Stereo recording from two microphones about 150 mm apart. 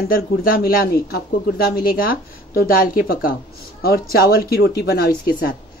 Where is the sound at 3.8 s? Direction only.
90° left.